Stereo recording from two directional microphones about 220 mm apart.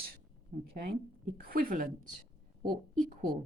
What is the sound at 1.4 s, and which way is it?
Speech, 40° right (ahead or behind).